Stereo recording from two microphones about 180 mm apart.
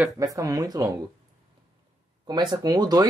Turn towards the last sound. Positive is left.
turn(degrees=-20)  # may be behind; listen again after turning